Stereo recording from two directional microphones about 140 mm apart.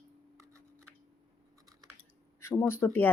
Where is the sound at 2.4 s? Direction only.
20° left (ahead or behind).